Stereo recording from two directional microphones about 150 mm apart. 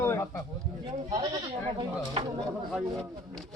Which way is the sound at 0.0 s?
20° left (ahead or behind).